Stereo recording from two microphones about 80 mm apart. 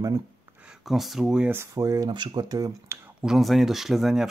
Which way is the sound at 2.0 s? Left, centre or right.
Right.